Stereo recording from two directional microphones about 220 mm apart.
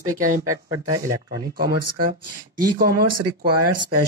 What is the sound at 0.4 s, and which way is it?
Speech, 15° right (ahead or behind).